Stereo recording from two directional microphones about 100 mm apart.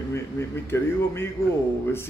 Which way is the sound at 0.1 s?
25° left (ahead or behind).